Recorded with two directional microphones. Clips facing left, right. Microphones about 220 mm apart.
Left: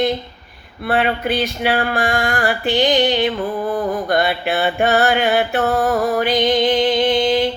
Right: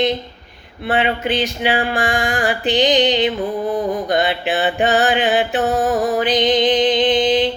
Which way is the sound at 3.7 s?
20° right (ahead or behind).